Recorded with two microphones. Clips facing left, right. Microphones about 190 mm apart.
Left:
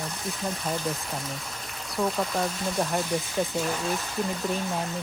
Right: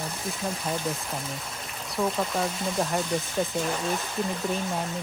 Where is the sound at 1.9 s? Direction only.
Centre (ahead or behind).